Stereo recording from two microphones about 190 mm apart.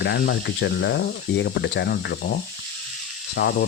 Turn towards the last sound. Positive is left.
turn(degrees=55)  # may be behind; listen again after turning